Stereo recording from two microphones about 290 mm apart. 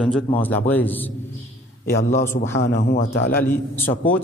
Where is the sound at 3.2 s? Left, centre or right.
Centre.